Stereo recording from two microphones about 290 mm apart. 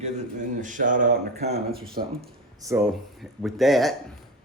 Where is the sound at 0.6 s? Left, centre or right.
Right.